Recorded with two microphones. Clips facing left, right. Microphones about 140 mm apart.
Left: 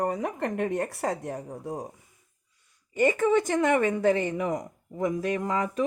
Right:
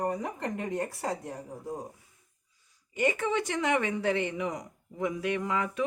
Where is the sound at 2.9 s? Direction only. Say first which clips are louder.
Left 6 dB; 45° left (ahead or behind).